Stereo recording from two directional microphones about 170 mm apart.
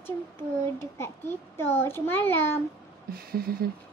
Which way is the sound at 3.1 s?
60° right (ahead or behind).